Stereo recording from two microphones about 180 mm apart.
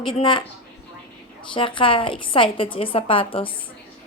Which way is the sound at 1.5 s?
30° left (ahead or behind).